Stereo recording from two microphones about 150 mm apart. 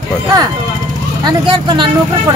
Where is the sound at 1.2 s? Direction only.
30° right (ahead or behind).